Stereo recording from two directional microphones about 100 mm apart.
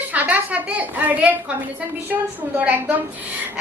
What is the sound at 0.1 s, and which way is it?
A woman's voice, 15° right (ahead or behind).